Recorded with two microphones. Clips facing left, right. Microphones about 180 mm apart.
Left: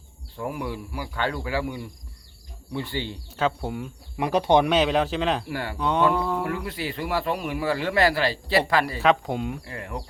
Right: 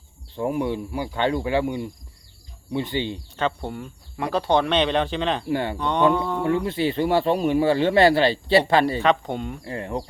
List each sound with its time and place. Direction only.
0.3 s speech: 25° right (ahead or behind)
3.3 s speech: 5° left (ahead or behind)
4.2 s speech: 15° left (ahead or behind)
5.5 s speech: 25° right (ahead or behind)
5.7 s speech: 5° left (ahead or behind)
6.4 s speech: 25° right (ahead or behind)
9.0 s speech: 5° left (ahead or behind)
9.6 s speech: 30° right (ahead or behind)